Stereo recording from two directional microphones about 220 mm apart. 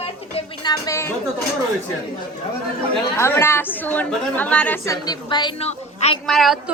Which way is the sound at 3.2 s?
10° left (ahead or behind).